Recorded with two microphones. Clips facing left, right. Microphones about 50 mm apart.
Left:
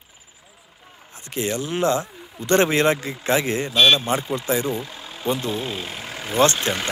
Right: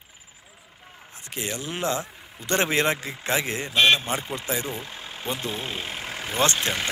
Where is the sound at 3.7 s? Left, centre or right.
Right.